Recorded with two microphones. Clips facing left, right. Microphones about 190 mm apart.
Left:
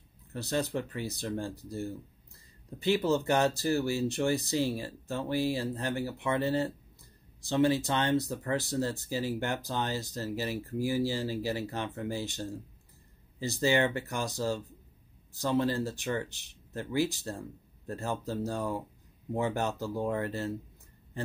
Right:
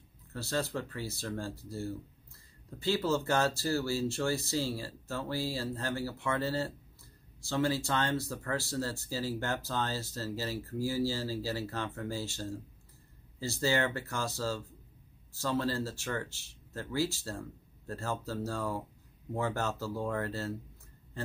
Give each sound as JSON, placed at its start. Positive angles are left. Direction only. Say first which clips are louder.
{"t": 0.3, "sound": "speech", "louder": "left 3 dB", "side_deg": 20}